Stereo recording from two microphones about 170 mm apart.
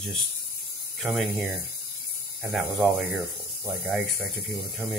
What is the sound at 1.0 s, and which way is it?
Speech, centre (ahead or behind).